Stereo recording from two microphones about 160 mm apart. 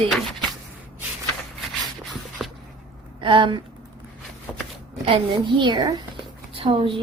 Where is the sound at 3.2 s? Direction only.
30° right (ahead or behind).